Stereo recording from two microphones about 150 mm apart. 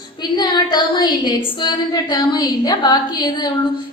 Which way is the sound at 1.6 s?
30° left (ahead or behind).